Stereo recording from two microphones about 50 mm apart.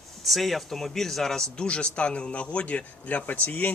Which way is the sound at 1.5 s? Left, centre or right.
Centre.